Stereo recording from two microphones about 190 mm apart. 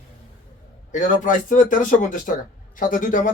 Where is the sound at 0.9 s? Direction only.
45° left (ahead or behind).